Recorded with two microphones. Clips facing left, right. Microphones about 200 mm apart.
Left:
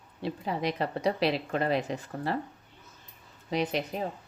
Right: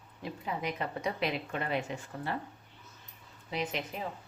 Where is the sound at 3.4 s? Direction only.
35° left (ahead or behind).